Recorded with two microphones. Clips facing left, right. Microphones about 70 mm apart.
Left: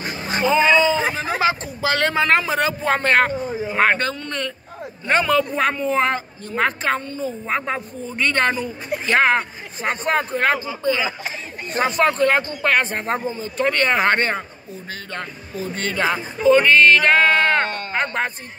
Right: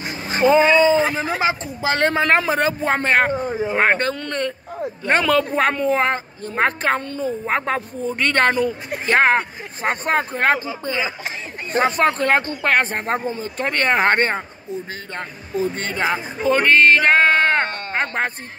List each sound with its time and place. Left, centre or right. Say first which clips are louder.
0.4 s speech: right 3 dB; right
2.9 s a man's voice: left 2 dB; centre
3.3 s speech: right 2 dB; right
3.9 s speech: right 2 dB; right
5.0 s speech: even; right
5.9 s speech: right 1 dB; right
7.1 s speech: right 2 dB; right
9.0 s speech: right 1 dB; right
15.7 s speech: even; right
16.4 s speech: left 1 dB; right